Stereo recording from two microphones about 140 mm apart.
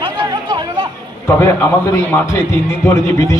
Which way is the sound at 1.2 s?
20° left (ahead or behind).